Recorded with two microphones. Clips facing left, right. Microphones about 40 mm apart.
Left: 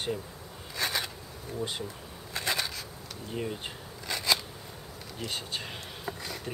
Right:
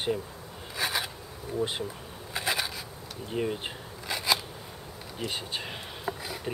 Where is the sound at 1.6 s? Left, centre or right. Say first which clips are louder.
Right 4 dB; centre.